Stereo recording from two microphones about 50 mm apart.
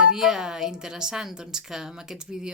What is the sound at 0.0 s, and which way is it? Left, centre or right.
A woman's voice, centre.